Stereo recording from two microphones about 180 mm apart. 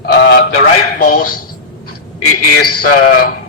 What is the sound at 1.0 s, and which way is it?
Speech, 50° left (ahead or behind).